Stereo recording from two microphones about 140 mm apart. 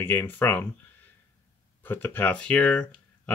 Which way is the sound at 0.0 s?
15° left (ahead or behind).